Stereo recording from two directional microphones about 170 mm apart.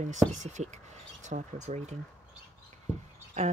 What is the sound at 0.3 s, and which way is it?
Speech, 45° right (ahead or behind).